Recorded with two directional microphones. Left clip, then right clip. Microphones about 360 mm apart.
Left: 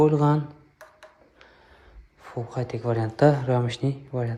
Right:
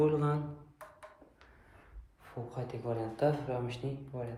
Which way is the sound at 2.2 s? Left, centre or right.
Left.